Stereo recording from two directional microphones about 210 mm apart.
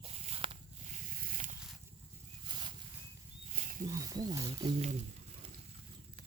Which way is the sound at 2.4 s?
20° right (ahead or behind).